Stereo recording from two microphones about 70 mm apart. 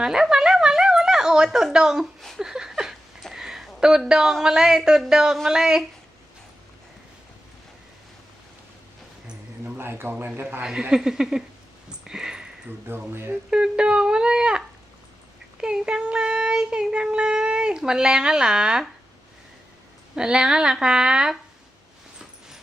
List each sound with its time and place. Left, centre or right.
0.0 s speech: centre
2.4 s a sound: centre
9.7 s a man's voice: right
10.6 s child singing: centre
11.9 s sniff: centre
12.6 s speech: right
13.5 s child singing: centre
15.6 s child singing: centre
20.1 s child singing: centre